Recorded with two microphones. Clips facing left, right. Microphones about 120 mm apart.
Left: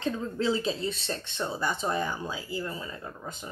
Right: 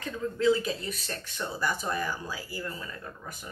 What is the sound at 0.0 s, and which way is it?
Speech, 25° left (ahead or behind).